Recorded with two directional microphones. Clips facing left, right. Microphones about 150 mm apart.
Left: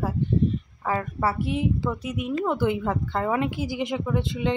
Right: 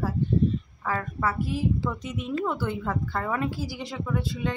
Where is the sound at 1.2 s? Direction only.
25° left (ahead or behind).